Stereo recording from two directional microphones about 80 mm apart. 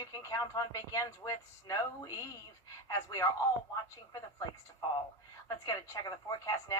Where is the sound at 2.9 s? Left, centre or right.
Left.